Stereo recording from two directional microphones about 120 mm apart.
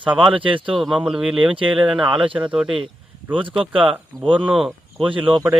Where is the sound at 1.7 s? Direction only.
10° right (ahead or behind).